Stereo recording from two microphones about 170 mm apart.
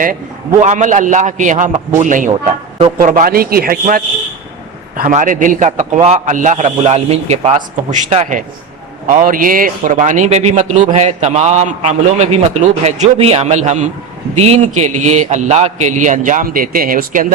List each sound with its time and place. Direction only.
0.6 s a man's voice: 45° right (ahead or behind)
9.0 s a man's voice: 50° right (ahead or behind)